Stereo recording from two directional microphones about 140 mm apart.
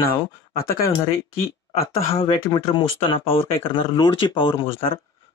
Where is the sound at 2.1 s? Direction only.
40° left (ahead or behind).